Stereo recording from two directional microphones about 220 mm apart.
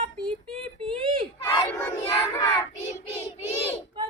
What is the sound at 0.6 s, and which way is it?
Child singing, 25° right (ahead or behind).